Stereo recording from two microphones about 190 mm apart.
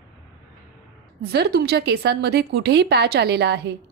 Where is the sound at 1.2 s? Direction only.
60° right (ahead or behind).